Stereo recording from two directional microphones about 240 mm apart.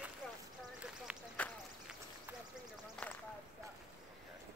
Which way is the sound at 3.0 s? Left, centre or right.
Centre.